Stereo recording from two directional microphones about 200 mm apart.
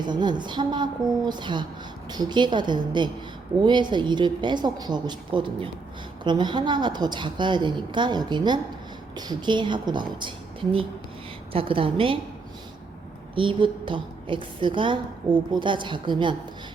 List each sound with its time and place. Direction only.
0.0 s a woman's voice: 20° right (ahead or behind)
13.3 s a woman's voice: 25° right (ahead or behind)